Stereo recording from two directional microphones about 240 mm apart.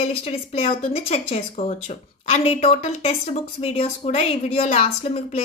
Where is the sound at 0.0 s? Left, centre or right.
Left.